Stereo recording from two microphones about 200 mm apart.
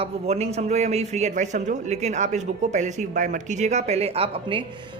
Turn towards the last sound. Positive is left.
turn(degrees=-25)  # may be behind; listen again after turning